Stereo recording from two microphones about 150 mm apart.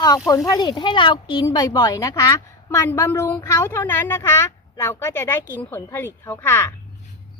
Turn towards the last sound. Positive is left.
turn(degrees=15)  # may be behind; listen again after turning